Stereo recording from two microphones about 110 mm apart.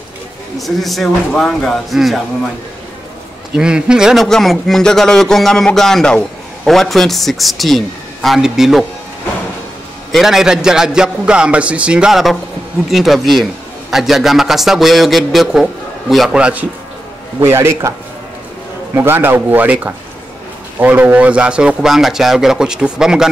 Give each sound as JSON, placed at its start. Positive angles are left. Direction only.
{"t": 0.6, "sound": "a man's voice", "side_deg": 0}
{"t": 3.5, "sound": "a man's voice", "side_deg": -10}
{"t": 10.1, "sound": "a man's voice", "side_deg": -5}
{"t": 17.4, "sound": "a man's voice", "side_deg": -25}
{"t": 18.9, "sound": "speech", "side_deg": -20}